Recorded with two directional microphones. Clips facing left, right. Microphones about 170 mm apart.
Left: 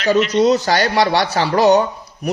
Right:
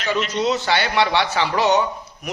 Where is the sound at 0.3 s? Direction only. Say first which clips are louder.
Left 6 dB; 40° left (ahead or behind).